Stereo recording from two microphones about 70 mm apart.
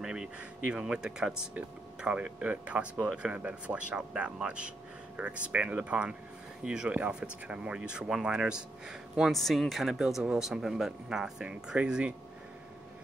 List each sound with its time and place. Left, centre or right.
0.0 s speech: centre
9.1 s speech: centre